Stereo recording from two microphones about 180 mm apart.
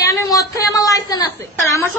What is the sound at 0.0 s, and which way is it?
A woman's voice, 15° left (ahead or behind).